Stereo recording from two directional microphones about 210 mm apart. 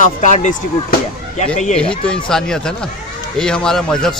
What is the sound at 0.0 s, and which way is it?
Speech, 35° left (ahead or behind).